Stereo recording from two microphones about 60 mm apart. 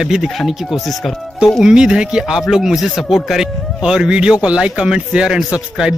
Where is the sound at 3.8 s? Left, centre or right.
Centre.